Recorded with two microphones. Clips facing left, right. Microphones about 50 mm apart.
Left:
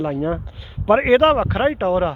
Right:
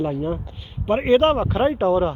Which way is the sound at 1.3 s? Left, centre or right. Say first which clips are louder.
Left 1 dB; left.